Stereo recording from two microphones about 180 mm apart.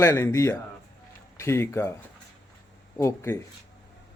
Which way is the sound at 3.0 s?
15° left (ahead or behind).